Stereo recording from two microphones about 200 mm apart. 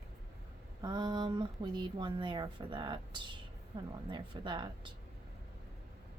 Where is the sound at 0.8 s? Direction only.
20° right (ahead or behind).